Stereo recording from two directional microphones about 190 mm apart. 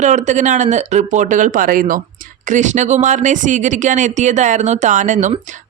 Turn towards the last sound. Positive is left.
turn(degrees=-40)  # may be behind; listen again after turning